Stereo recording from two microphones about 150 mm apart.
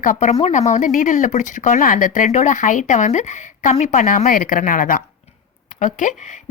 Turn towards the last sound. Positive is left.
turn(degrees=55)  # may be behind; listen again after turning